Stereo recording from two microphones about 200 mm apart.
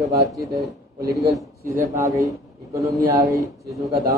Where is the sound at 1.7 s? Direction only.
40° right (ahead or behind).